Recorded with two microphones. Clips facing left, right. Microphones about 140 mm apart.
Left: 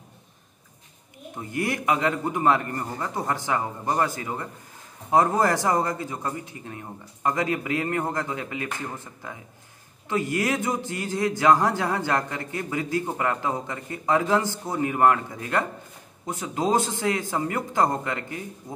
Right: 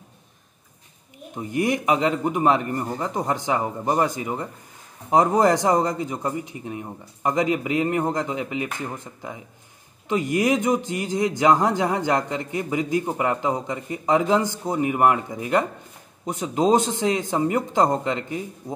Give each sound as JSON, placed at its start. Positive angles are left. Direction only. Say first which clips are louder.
{"t": 1.3, "sound": "a man's voice", "louder": "right 5 dB", "side_deg": -15}